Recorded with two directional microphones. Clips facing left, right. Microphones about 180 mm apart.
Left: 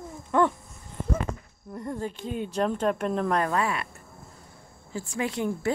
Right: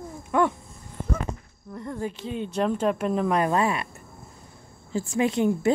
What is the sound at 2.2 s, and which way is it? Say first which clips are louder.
A woman's voice: right 1 dB; 5° left (ahead or behind).